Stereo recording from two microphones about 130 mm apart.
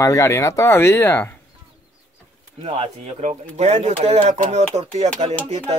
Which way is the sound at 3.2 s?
55° right (ahead or behind).